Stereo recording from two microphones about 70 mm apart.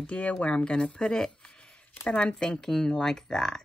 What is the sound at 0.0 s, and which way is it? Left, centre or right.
Speech, centre.